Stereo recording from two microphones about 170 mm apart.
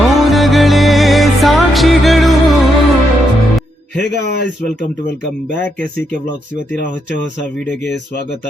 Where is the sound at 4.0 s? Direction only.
80° left.